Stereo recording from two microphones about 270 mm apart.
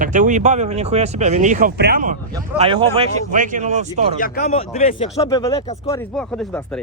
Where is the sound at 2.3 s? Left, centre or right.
Centre.